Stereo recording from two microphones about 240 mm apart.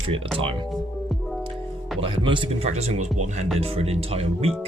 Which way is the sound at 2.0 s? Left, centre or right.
Right.